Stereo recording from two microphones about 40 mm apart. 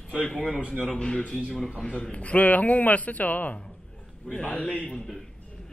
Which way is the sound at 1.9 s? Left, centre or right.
Left.